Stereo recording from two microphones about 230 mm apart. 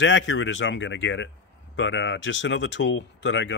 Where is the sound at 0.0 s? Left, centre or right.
Left.